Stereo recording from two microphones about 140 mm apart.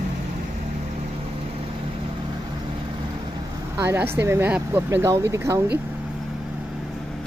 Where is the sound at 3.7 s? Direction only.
15° right (ahead or behind).